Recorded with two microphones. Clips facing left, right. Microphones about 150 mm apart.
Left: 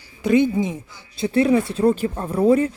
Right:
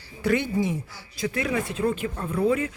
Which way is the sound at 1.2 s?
30° left (ahead or behind).